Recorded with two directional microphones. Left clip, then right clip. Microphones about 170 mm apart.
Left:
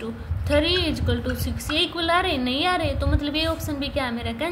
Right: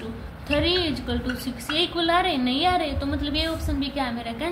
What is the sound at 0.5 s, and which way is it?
A woman's voice, 35° left (ahead or behind).